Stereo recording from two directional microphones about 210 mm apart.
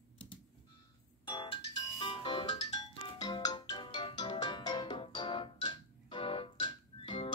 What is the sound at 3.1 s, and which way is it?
Music, 20° left (ahead or behind).